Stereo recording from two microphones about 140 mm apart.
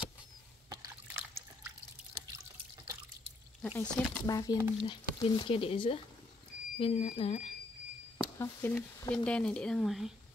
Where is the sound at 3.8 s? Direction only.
10° left (ahead or behind).